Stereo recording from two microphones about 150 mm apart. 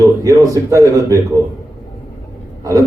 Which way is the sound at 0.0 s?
20° right (ahead or behind).